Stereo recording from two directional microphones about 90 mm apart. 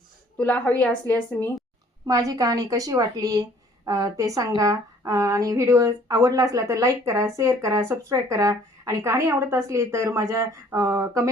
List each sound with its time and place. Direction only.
0.3 s a woman's voice: 15° left (ahead or behind)
2.0 s a woman's voice: 40° right (ahead or behind)